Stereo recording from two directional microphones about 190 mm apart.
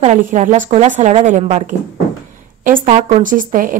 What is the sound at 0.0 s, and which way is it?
A woman's voice, 40° right (ahead or behind).